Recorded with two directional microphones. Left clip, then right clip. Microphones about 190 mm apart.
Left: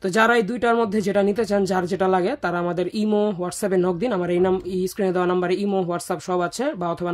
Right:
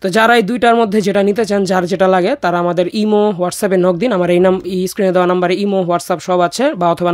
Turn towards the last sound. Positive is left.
turn(degrees=-45)  # may be behind; listen again after turning